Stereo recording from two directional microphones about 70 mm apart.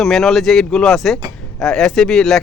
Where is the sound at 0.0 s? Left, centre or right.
Centre.